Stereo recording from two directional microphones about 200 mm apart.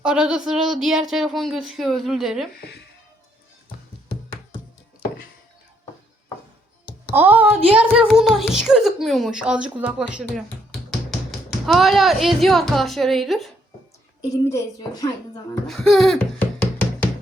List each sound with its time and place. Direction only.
0.0 s speech: 5° right (ahead or behind)
2.6 s speech: 55° left (ahead or behind)
7.1 s speech: 10° right (ahead or behind)
14.5 s speech: 15° left (ahead or behind)
15.6 s laughter: centre (ahead or behind)